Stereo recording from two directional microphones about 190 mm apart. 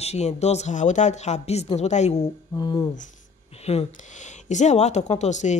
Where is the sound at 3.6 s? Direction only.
35° left (ahead or behind).